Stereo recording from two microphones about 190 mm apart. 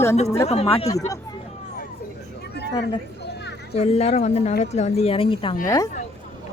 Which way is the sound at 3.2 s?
60° left (ahead or behind).